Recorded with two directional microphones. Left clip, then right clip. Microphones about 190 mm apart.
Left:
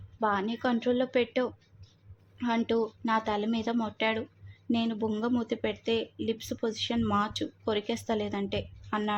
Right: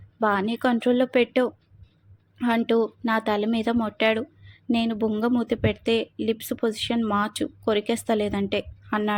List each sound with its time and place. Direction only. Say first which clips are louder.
0.2 s speech: right 6 dB; 20° right (ahead or behind)